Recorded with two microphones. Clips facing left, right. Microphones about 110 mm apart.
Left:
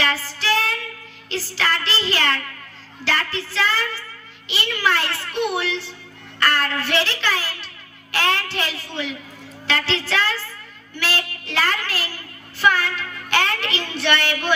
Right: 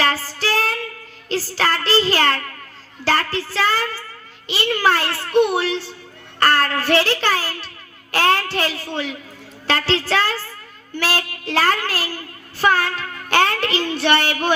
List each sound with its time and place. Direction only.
0.0 s music: 40° right (ahead or behind)
1.3 s a child's voice: 40° right (ahead or behind)